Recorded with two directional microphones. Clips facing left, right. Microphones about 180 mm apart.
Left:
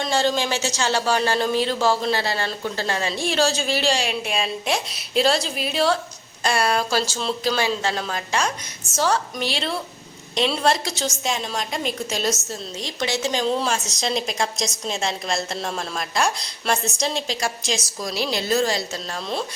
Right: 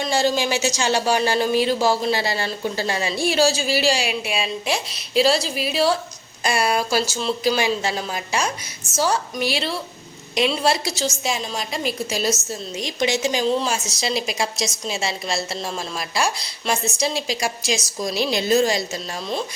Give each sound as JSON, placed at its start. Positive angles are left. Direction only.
{"t": 0.0, "sound": "speech", "side_deg": -10}